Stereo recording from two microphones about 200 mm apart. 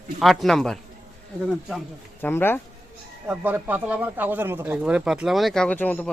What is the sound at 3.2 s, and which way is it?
Speech, 10° right (ahead or behind).